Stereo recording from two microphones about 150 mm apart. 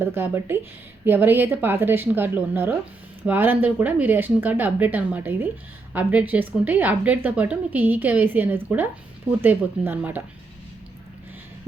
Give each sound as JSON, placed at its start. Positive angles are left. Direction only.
{"t": 0.0, "sound": "speech", "side_deg": -15}